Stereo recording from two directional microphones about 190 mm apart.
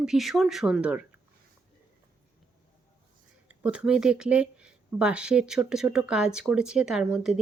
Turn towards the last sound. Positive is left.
turn(degrees=-5)  # may be behind; listen again after turning